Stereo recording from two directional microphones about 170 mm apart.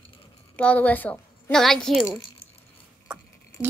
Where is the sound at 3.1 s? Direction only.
5° right (ahead or behind).